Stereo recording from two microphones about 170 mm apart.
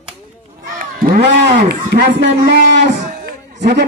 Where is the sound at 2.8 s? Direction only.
50° right (ahead or behind).